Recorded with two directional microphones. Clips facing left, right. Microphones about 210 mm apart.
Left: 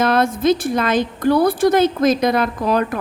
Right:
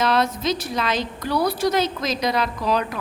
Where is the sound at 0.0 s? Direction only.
50° left (ahead or behind).